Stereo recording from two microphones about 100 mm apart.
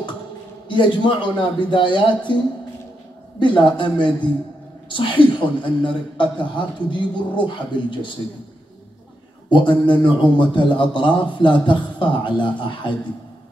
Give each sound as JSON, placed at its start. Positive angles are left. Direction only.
{"t": 0.7, "sound": "a man's voice", "side_deg": 55}
{"t": 3.3, "sound": "a man's voice", "side_deg": 50}
{"t": 9.5, "sound": "a man's voice", "side_deg": 55}